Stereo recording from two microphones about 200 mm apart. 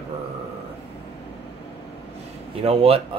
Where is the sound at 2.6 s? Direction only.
30° right (ahead or behind).